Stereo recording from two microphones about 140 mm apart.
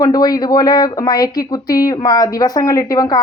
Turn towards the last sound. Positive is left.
turn(degrees=25)  # may be behind; listen again after turning